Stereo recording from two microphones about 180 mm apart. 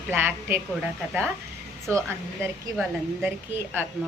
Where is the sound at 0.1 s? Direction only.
10° right (ahead or behind).